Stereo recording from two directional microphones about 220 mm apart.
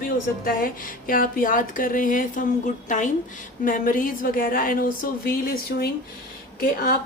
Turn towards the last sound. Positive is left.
turn(degrees=40)  # may be behind; listen again after turning